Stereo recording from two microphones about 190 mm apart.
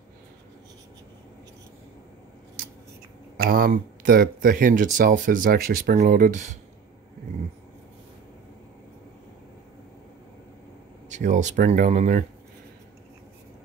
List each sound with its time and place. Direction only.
3.4 s speech: 50° right (ahead or behind)
11.1 s speech: 40° right (ahead or behind)